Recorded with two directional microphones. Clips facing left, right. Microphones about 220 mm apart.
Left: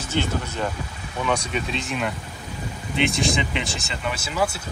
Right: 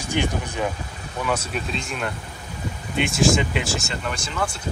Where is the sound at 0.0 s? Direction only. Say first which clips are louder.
Right 1 dB; 15° right (ahead or behind); by 4.6 s 5° left (ahead or behind).